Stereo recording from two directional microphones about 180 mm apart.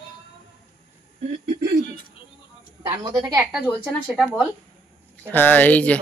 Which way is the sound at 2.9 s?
20° right (ahead or behind).